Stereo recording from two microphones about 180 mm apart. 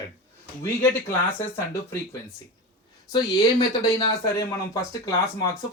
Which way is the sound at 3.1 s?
20° left (ahead or behind).